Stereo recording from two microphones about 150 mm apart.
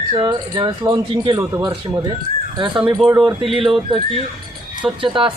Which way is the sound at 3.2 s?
35° right (ahead or behind).